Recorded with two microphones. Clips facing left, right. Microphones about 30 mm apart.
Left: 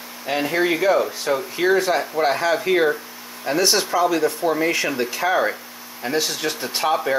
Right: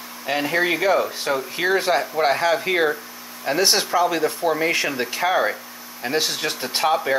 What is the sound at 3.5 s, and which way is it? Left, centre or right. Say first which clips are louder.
Speech: left 1 dB; right.